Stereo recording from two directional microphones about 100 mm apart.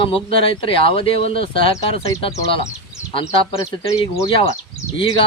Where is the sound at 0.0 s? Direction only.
65° left (ahead or behind).